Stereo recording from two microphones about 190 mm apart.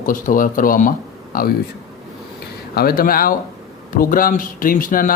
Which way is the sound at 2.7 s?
50° left (ahead or behind).